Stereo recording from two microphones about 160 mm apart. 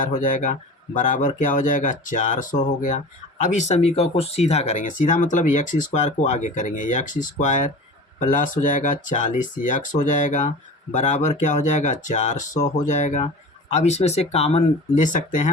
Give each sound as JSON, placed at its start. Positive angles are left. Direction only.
{"t": 0.0, "sound": "speech", "side_deg": 55}
{"t": 15.0, "sound": "speech", "side_deg": 55}